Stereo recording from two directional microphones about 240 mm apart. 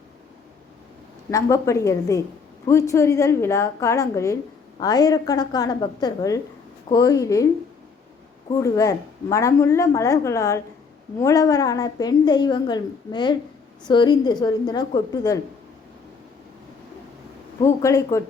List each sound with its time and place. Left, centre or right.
1.3 s speech: centre
8.4 s speech: centre
17.6 s speech: centre